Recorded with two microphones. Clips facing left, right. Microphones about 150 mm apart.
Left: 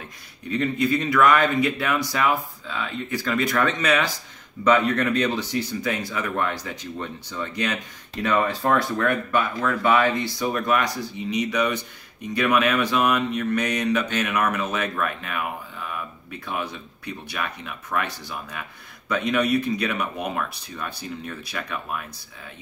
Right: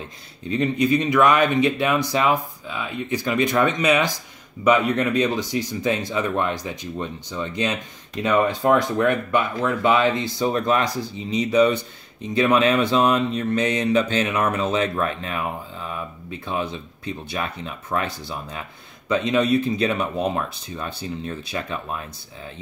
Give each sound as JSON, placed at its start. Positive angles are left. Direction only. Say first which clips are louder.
{"t": 0.5, "sound": "speech", "louder": "right 3 dB", "side_deg": -20}